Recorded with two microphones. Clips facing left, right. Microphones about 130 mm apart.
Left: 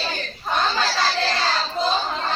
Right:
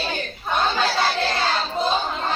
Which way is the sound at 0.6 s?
55° right (ahead or behind).